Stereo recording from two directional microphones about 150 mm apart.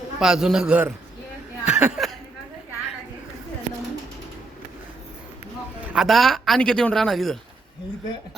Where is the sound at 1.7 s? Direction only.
5° right (ahead or behind).